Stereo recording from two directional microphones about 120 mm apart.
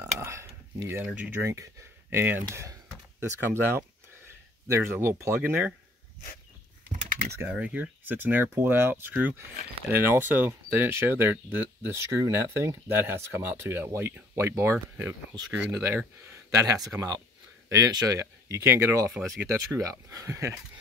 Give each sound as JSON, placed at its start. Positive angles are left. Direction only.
{"t": 0.0, "sound": "a sound", "side_deg": -25}
{"t": 1.0, "sound": "speech", "side_deg": -10}
{"t": 1.4, "sound": "speech", "side_deg": -25}
{"t": 7.3, "sound": "speech", "side_deg": -10}
{"t": 19.0, "sound": "speech", "side_deg": 0}
{"t": 19.4, "sound": "speech", "side_deg": -25}